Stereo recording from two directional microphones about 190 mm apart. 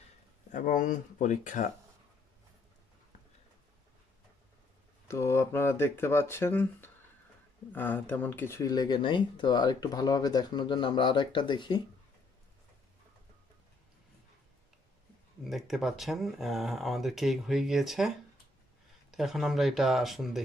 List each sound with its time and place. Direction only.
0.5 s speech: 40° left (ahead or behind)
5.0 s speech: 15° left (ahead or behind)
15.4 s speech: centre (ahead or behind)